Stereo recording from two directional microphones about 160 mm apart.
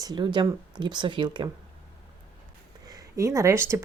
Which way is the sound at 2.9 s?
20° right (ahead or behind).